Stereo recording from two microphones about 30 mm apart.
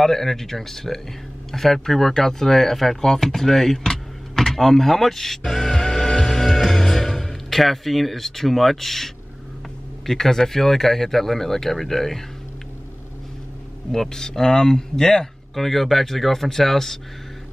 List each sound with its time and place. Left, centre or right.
0.0 s speech: centre
6.4 s music: centre
10.0 s speech: centre
13.9 s speech: centre
15.5 s speech: centre